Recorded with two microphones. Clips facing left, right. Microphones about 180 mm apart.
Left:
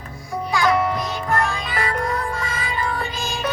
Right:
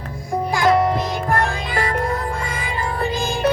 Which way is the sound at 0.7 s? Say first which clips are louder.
Right 5 dB; 30° right (ahead or behind).